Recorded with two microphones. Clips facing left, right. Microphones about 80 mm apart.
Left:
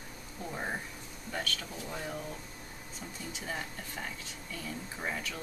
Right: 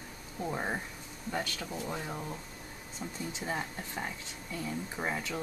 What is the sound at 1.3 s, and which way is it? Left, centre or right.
Speech, centre.